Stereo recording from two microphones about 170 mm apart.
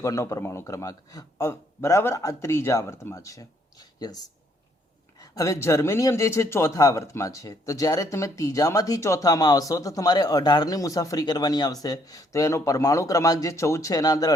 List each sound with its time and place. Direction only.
0.0 s a man's voice: 20° left (ahead or behind)